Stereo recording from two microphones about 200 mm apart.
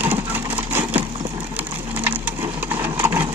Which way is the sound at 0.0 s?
10° right (ahead or behind).